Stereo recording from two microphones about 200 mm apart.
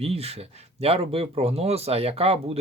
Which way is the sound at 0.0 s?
30° right (ahead or behind).